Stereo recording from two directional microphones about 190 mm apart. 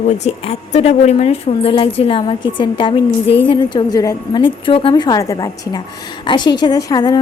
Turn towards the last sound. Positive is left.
turn(degrees=20)  # may be behind; listen again after turning